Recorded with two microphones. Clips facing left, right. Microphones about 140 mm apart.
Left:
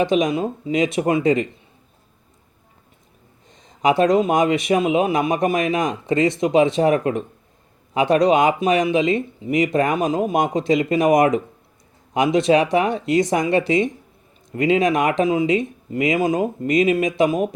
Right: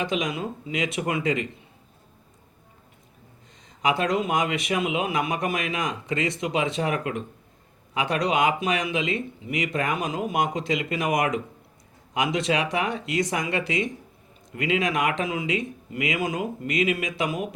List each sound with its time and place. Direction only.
0.3 s speech: 30° left (ahead or behind)
3.8 s speech: 45° left (ahead or behind)
5.8 s speech: 25° left (ahead or behind)
8.1 s speech: 45° left (ahead or behind)
9.0 s speech: 25° left (ahead or behind)
9.5 s speech: 40° left (ahead or behind)
12.1 s speech: 30° left (ahead or behind)